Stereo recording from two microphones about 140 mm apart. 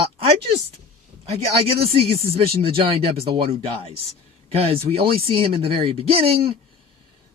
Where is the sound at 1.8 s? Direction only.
45° right (ahead or behind).